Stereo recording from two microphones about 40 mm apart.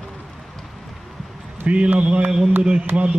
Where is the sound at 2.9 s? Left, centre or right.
Right.